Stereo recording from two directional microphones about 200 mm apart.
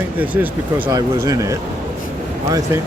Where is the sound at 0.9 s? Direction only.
15° right (ahead or behind).